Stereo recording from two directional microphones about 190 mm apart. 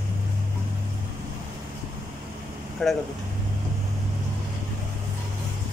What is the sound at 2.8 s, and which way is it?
Speech, 5° left (ahead or behind).